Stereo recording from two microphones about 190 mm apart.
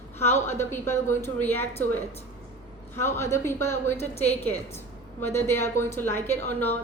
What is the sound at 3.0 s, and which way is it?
Speech, 15° left (ahead or behind).